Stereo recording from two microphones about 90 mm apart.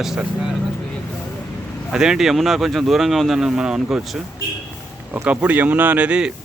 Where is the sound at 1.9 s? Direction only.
10° right (ahead or behind).